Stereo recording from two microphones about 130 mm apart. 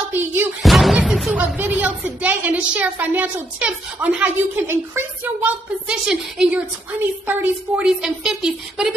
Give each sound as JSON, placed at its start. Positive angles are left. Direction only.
{"t": 0.1, "sound": "speech", "side_deg": -15}
{"t": 0.6, "sound": "speech", "side_deg": 0}